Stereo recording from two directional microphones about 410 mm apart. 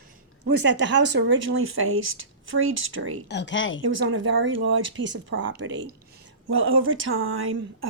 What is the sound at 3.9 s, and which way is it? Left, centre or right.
Speech, right.